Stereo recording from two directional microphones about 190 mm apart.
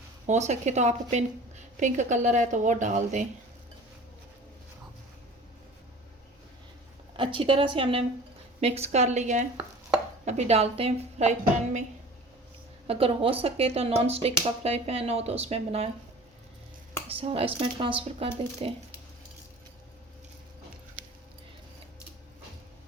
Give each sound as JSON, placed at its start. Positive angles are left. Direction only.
{"t": 0.3, "sound": "a woman's voice", "side_deg": -40}
{"t": 7.2, "sound": "a woman's voice", "side_deg": -25}
{"t": 12.9, "sound": "a woman's voice", "side_deg": -30}
{"t": 17.1, "sound": "a woman's voice", "side_deg": -30}